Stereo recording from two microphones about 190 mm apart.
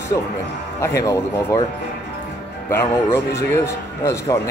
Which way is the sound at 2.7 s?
15° left (ahead or behind).